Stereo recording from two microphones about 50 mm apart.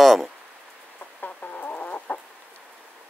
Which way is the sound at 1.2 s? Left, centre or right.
Left.